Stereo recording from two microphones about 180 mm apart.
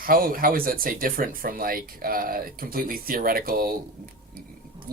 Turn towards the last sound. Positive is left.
turn(degrees=-55)  # may be behind; listen again after turning